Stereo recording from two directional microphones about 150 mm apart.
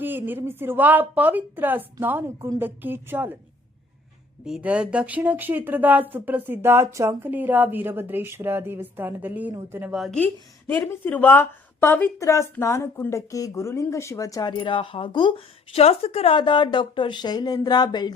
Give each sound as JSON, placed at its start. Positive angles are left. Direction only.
{"t": 0.0, "sound": "speech", "side_deg": -15}
{"t": 4.4, "sound": "speech", "side_deg": -5}
{"t": 10.7, "sound": "speech", "side_deg": 10}